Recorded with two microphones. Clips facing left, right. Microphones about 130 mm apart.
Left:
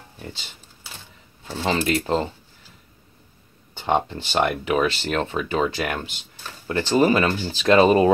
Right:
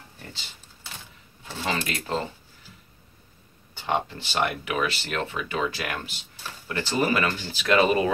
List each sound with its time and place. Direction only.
1.6 s speech: 30° left (ahead or behind)
3.7 s speech: 25° left (ahead or behind)